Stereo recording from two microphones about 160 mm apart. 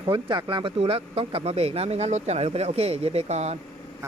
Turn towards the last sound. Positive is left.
turn(degrees=-45)  # may be behind; listen again after turning